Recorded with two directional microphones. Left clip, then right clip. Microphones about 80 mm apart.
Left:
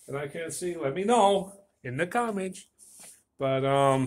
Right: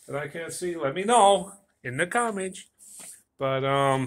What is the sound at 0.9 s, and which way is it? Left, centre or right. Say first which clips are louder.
Speech: right 3 dB; left.